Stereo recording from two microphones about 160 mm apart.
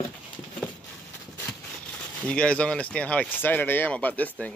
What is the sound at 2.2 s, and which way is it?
Speech, 5° left (ahead or behind).